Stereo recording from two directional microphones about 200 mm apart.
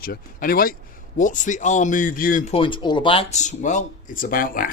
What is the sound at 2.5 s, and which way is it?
Speech, 25° left (ahead or behind).